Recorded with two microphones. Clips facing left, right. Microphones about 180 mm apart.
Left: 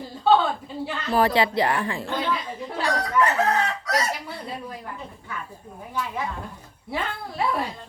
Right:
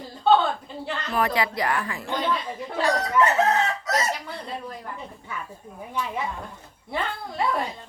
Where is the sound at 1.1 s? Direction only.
30° left (ahead or behind).